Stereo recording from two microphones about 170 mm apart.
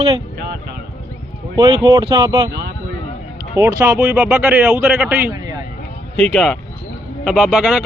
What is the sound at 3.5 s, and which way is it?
Speech, 10° right (ahead or behind).